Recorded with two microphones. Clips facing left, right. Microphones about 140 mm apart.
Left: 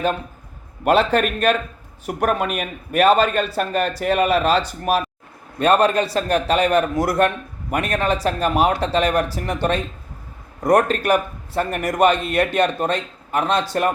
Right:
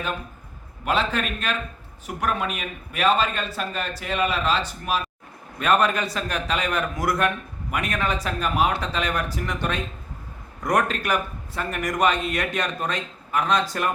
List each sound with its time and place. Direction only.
0.9 s a man's voice: 60° left (ahead or behind)
5.5 s speech: 30° left (ahead or behind)